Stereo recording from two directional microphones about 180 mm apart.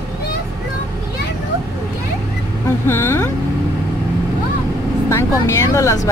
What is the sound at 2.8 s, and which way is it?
Speech, 15° left (ahead or behind).